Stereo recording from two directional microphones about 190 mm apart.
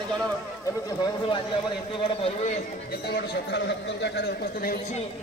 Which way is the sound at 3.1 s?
65° left (ahead or behind).